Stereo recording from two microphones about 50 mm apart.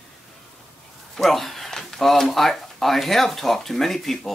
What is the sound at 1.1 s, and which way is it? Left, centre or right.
Speech, centre.